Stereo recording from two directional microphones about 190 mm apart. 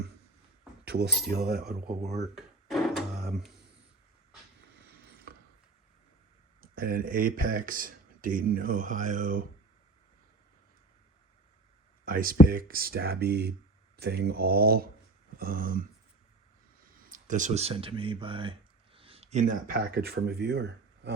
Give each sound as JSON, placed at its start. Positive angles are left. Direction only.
{"t": 0.9, "sound": "speech", "side_deg": -60}
{"t": 2.1, "sound": "a sound", "side_deg": 0}
{"t": 3.4, "sound": "speech", "side_deg": 0}
{"t": 6.6, "sound": "speech", "side_deg": -50}
{"t": 12.0, "sound": "speech", "side_deg": -45}
{"t": 17.1, "sound": "speech", "side_deg": -40}